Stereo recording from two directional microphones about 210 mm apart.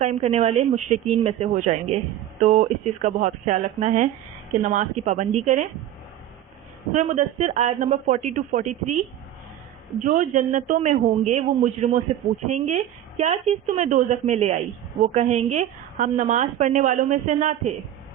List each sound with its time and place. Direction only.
0.0 s a woman's voice: 30° right (ahead or behind)
6.9 s a woman's voice: 35° right (ahead or behind)
10.0 s a woman's voice: 35° right (ahead or behind)